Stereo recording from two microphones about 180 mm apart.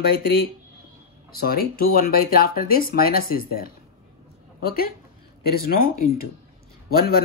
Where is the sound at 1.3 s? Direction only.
55° left (ahead or behind).